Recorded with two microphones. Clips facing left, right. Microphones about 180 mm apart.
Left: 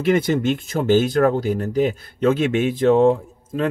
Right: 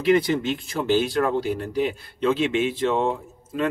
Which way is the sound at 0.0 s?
50° left (ahead or behind).